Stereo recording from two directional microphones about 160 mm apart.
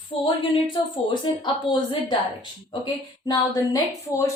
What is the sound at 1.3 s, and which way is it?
Speech, 30° left (ahead or behind).